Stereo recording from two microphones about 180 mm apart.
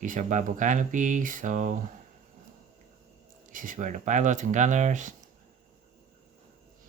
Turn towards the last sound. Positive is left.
turn(degrees=-45)  # may be behind; listen again after turning